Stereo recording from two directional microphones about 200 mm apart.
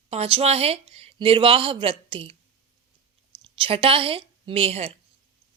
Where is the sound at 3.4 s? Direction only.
25° right (ahead or behind).